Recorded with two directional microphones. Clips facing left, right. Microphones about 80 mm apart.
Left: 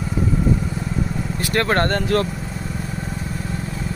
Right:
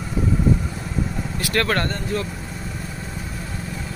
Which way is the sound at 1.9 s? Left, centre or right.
Left.